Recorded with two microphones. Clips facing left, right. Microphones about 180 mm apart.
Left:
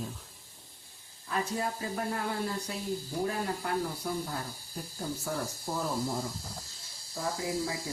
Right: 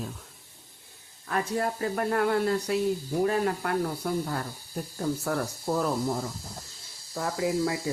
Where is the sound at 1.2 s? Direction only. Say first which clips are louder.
Right 4 dB; 60° right (ahead or behind).